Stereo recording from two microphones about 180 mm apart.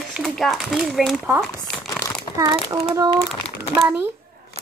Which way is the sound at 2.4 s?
20° right (ahead or behind).